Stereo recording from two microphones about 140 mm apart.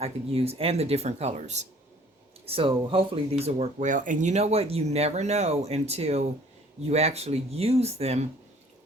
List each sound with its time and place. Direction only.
0.0 s speech: 45° right (ahead or behind)
2.5 s speech: 40° right (ahead or behind)